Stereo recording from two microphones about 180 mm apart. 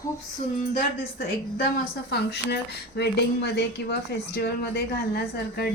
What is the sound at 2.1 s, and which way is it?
A woman's voice, 65° left (ahead or behind).